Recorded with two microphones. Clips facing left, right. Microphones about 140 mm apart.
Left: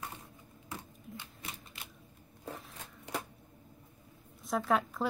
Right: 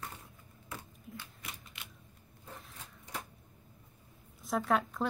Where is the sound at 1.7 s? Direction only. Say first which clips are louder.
Left 1 dB; 35° left (ahead or behind).